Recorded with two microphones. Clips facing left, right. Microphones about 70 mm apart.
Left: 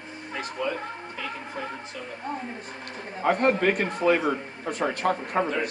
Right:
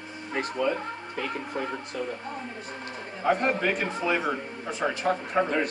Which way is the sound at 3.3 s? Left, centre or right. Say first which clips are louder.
Left 3 dB; left.